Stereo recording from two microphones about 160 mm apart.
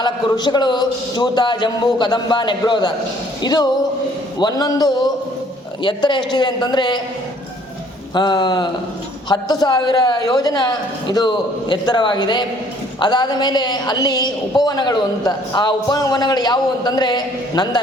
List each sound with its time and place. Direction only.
0.0 s a woman's voice: 25° left (ahead or behind)
8.1 s a woman's voice: 30° left (ahead or behind)